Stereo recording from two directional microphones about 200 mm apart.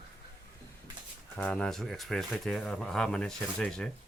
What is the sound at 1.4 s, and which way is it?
Speech, 5° left (ahead or behind).